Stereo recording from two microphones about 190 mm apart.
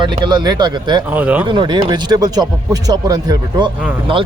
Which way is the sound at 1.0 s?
10° right (ahead or behind).